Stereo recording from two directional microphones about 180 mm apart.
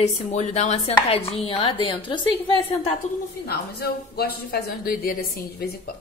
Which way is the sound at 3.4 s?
60° left (ahead or behind).